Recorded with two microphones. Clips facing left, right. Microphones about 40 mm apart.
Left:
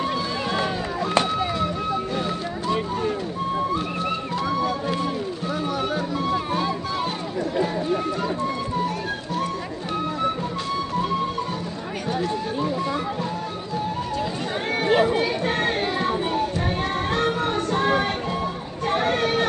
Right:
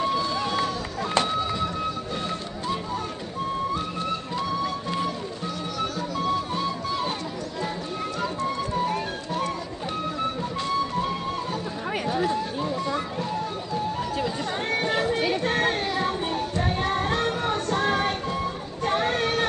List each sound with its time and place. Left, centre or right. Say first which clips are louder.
0.0 s run: even; centre
1.1 s chop: left 2 dB; centre
3.7 s music: left 3 dB; centre
6.3 s music: left 3 dB; left
12.3 s a sound: left 1 dB; centre
14.7 s chatter: left 6 dB; centre
15.4 s music: left 1 dB; centre